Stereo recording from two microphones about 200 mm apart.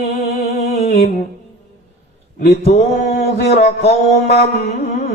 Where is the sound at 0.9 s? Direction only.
50° left (ahead or behind).